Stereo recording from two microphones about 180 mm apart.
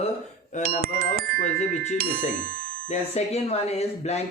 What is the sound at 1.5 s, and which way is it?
Speech, 40° left (ahead or behind).